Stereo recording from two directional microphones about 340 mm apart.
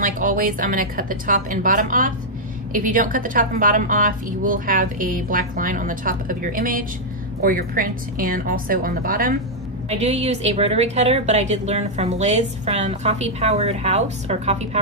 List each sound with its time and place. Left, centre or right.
0.0 s a woman's voice: right